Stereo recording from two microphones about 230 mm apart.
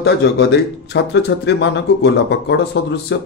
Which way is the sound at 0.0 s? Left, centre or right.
Left.